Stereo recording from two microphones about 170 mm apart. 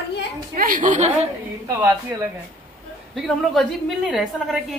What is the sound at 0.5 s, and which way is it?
Speech, 55° right (ahead or behind).